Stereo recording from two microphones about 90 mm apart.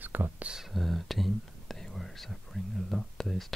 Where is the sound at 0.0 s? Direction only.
20° right (ahead or behind).